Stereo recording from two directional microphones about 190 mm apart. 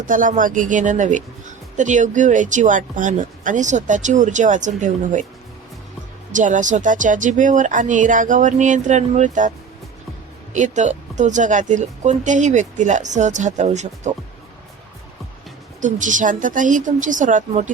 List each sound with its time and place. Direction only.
0.0 s a woman's voice: 45° right (ahead or behind)
6.3 s speech: 40° right (ahead or behind)
10.5 s speech: 40° right (ahead or behind)
15.8 s a woman's voice: 40° right (ahead or behind)